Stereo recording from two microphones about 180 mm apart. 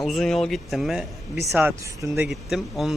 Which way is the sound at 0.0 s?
Centre (ahead or behind).